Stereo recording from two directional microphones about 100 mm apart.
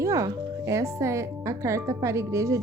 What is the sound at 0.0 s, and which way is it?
A woman's voice, 30° right (ahead or behind).